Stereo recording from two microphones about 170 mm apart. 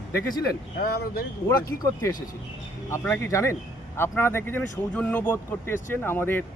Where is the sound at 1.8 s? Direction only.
15° left (ahead or behind).